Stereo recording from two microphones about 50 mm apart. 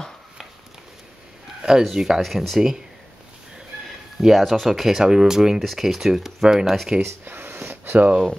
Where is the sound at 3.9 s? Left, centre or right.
Centre.